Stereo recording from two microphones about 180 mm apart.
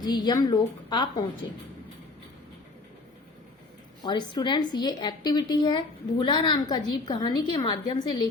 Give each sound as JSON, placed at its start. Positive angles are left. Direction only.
{"t": 0.0, "sound": "a woman's voice", "side_deg": 25}
{"t": 4.0, "sound": "a woman's voice", "side_deg": 25}